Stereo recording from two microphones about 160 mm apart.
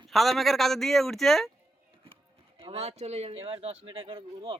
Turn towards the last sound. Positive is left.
turn(degrees=-35)  # may be behind; listen again after turning